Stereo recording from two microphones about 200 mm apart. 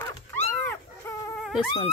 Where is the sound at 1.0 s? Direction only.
10° left (ahead or behind).